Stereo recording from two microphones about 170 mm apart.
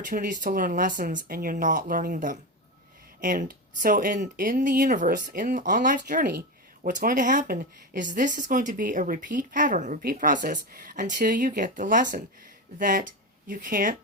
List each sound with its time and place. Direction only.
0.0 s a woman's voice: 50° right (ahead or behind)